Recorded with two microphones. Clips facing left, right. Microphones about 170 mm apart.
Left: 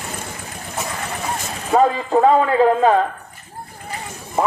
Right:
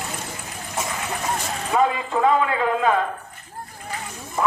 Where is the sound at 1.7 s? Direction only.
35° left (ahead or behind).